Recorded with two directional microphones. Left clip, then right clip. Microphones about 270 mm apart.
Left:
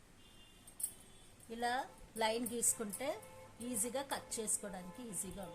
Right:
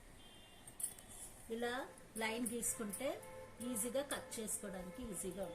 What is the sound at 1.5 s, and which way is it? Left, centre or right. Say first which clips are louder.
A woman's voice: left 4 dB; left.